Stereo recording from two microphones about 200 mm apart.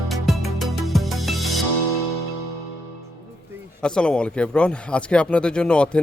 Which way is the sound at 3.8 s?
5° left (ahead or behind).